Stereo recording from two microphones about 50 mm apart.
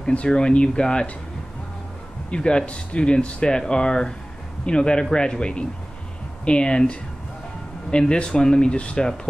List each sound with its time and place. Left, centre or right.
0.1 s speech: left
2.3 s speech: left